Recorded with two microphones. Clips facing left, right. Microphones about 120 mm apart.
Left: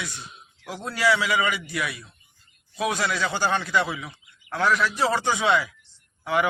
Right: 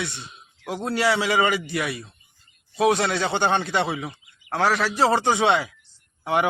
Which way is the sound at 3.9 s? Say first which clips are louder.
Right 4 dB; 35° right (ahead or behind).